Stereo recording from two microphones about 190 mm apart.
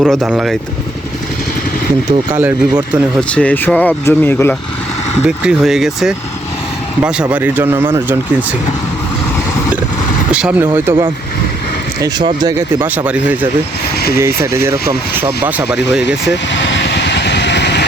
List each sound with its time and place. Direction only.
0.0 s speech: centre (ahead or behind)
2.0 s speech: 10° right (ahead or behind)
3.2 s speech: 5° left (ahead or behind)
5.2 s speech: 5° right (ahead or behind)
10.3 s speech: 5° right (ahead or behind)
12.0 s speech: 20° right (ahead or behind)
16.5 s vehicle: 65° left (ahead or behind)